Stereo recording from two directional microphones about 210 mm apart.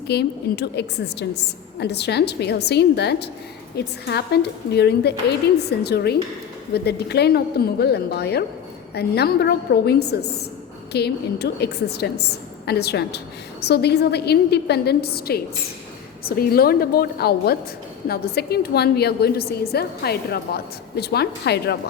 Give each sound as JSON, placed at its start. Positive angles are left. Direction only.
{"t": 0.1, "sound": "a woman's voice", "side_deg": 50}